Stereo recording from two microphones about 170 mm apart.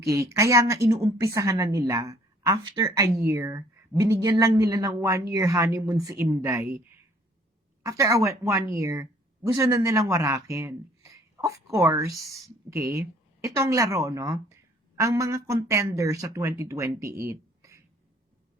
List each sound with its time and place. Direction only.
0.1 s a woman's voice: 20° right (ahead or behind)
7.9 s a woman's voice: 20° right (ahead or behind)